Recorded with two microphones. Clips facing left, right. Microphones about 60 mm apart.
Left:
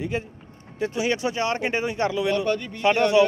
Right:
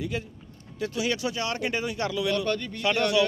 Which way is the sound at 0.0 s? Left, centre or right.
Left.